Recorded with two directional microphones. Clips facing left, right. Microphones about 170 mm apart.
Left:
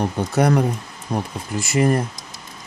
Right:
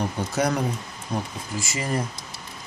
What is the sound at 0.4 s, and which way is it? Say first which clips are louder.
Speech: left 6 dB; 55° left (ahead or behind).